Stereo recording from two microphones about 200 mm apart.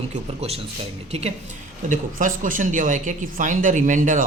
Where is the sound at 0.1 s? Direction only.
30° right (ahead or behind).